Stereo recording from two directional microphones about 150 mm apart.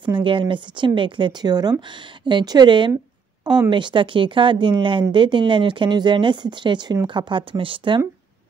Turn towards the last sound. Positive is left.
turn(degrees=-35)  # may be behind; listen again after turning